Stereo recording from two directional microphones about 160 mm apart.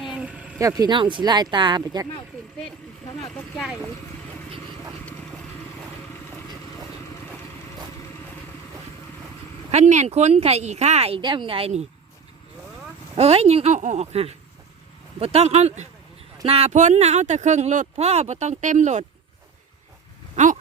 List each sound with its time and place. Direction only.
0.0 s vehicle: 5° right (ahead or behind)
0.6 s speech: 20° right (ahead or behind)
3.2 s speech: 5° left (ahead or behind)
9.6 s speech: 45° right (ahead or behind)
13.1 s speech: 40° right (ahead or behind)
20.3 s a sound: 50° right (ahead or behind)